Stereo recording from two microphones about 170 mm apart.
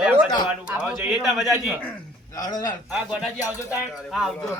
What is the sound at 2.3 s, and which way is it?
Speech, 20° left (ahead or behind).